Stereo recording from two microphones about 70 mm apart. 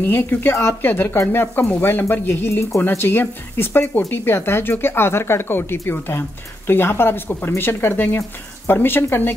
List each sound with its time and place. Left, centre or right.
0.0 s speech: left